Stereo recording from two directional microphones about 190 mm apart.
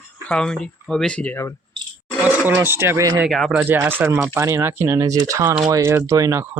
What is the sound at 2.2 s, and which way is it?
Speech, 10° right (ahead or behind).